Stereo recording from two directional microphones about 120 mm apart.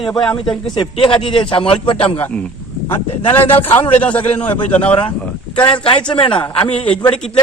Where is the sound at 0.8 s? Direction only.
45° left (ahead or behind).